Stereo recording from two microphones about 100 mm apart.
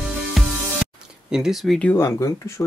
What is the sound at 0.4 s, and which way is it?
Music, centre (ahead or behind).